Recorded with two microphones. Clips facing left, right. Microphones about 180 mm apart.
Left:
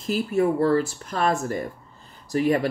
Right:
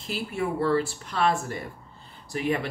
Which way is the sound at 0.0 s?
45° left (ahead or behind).